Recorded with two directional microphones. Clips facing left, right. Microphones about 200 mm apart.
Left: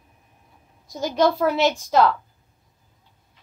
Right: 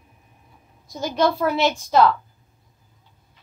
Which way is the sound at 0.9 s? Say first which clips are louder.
Left 1 dB; 40° left (ahead or behind).